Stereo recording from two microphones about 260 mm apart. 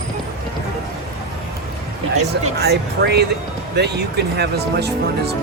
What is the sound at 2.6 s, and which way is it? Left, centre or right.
Speech, right.